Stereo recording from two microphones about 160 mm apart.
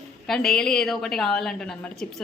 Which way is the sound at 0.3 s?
5° left (ahead or behind).